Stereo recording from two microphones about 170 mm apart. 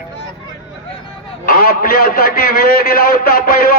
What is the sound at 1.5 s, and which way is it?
A man's voice, 60° left (ahead or behind).